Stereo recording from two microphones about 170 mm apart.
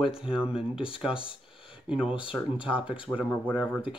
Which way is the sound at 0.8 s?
30° left (ahead or behind).